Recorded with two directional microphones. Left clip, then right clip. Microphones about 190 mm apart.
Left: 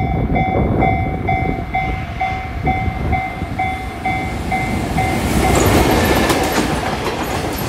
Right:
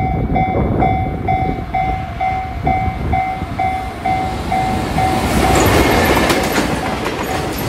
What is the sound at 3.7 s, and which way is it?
Train, 15° right (ahead or behind).